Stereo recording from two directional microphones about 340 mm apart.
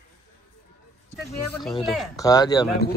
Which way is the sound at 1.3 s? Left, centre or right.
Centre.